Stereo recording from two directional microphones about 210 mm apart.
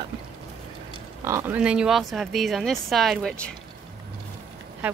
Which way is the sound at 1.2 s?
10° right (ahead or behind).